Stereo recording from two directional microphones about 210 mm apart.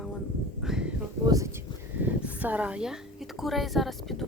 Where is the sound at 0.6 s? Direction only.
5° right (ahead or behind).